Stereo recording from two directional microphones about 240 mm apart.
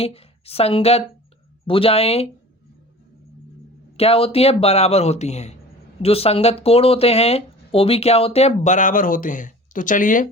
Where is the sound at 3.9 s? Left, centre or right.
Left.